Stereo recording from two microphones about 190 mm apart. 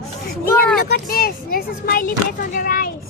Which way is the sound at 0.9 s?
50° left (ahead or behind).